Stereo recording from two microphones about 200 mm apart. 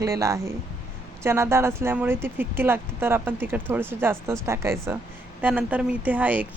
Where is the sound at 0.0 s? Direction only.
15° right (ahead or behind).